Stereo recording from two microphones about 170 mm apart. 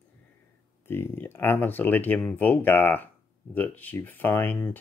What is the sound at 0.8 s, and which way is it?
Speech, 15° left (ahead or behind).